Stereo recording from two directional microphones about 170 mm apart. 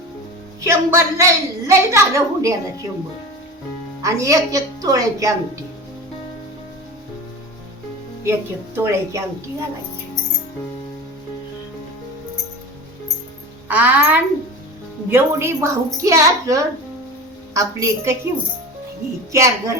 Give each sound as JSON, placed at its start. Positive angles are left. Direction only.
{"t": 0.6, "sound": "a woman's voice", "side_deg": -15}
{"t": 4.0, "sound": "a woman's voice", "side_deg": -20}
{"t": 8.2, "sound": "a woman's voice", "side_deg": -15}
{"t": 13.7, "sound": "a woman's voice", "side_deg": -10}
{"t": 19.3, "sound": "a woman's voice", "side_deg": -15}